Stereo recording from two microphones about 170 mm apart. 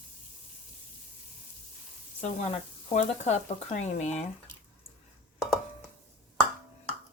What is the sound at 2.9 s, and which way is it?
Speech, 40° left (ahead or behind).